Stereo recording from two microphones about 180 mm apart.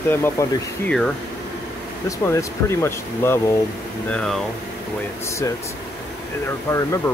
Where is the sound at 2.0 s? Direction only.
15° left (ahead or behind).